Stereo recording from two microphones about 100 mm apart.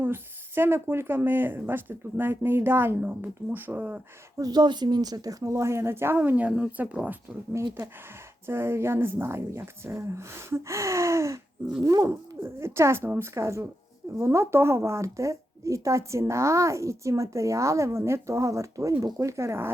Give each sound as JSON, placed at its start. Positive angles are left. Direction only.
{"t": 0.0, "sound": "speech", "side_deg": -20}
{"t": 4.4, "sound": "speech", "side_deg": -40}
{"t": 7.5, "sound": "a woman's voice", "side_deg": -30}